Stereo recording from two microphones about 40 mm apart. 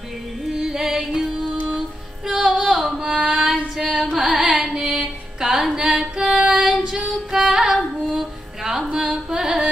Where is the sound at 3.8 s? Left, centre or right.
Centre.